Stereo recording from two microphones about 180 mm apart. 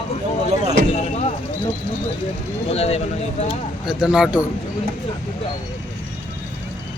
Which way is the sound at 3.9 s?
5° right (ahead or behind).